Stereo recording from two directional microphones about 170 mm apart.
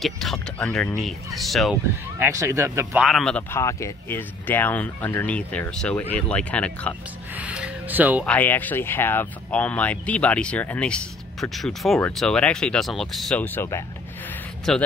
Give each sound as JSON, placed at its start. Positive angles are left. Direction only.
{"t": 0.0, "sound": "speech", "side_deg": 0}
{"t": 2.1, "sound": "speech", "side_deg": -15}
{"t": 3.0, "sound": "speech", "side_deg": 0}
{"t": 3.5, "sound": "speech", "side_deg": 15}
{"t": 7.3, "sound": "speech", "side_deg": -5}
{"t": 8.3, "sound": "speech", "side_deg": 10}
{"t": 14.7, "sound": "speech", "side_deg": 0}